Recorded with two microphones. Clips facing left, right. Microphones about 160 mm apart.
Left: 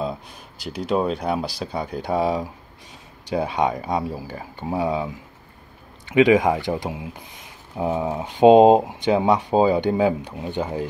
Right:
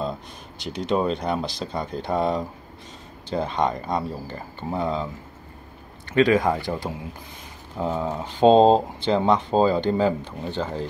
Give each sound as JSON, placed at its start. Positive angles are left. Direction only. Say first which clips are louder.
{"t": 0.6, "sound": "speech", "louder": "left 1 dB", "side_deg": 5}